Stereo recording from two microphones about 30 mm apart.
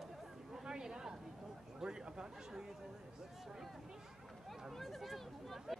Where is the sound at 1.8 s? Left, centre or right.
Right.